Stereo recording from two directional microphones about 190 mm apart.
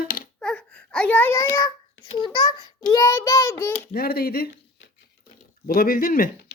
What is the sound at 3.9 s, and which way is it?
Speech, 55° left (ahead or behind).